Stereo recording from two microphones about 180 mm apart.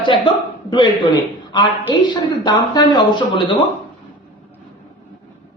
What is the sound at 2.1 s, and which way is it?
A woman's voice, 25° left (ahead or behind).